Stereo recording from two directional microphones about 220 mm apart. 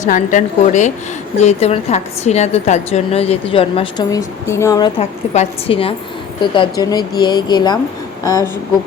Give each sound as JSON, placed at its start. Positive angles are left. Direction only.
{"t": 0.0, "sound": "a woman's voice", "side_deg": 35}
{"t": 4.9, "sound": "a woman's voice", "side_deg": 30}